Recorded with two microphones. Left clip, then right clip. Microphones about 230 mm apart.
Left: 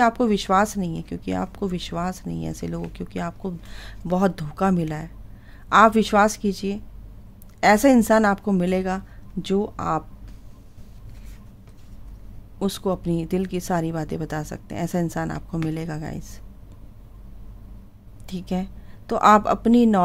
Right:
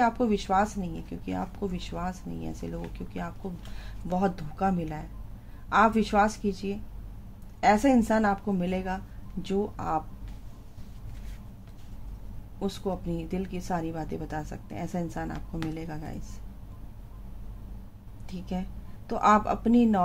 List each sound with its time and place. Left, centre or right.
0.0 s speech: left
12.5 s speech: left
18.2 s a woman's voice: left